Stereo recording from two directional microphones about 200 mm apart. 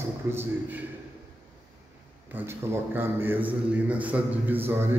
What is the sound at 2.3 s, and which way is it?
A man's voice, 10° right (ahead or behind).